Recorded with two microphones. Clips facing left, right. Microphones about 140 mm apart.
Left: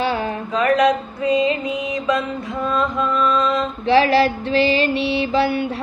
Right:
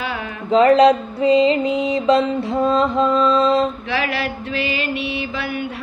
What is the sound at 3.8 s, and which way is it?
Mantra, 30° left (ahead or behind).